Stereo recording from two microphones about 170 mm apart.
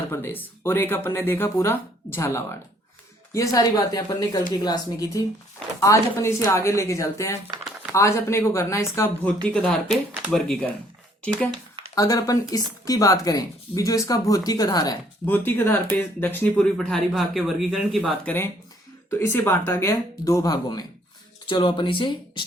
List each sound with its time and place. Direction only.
0.1 s speech: 15° left (ahead or behind)
7.4 s a sound: 5° right (ahead or behind)
7.9 s speech: 15° left (ahead or behind)
11.9 s speech: 20° left (ahead or behind)
15.3 s speech: 10° left (ahead or behind)
18.2 s speech: 10° left (ahead or behind); by 22.4 s 30° left (ahead or behind)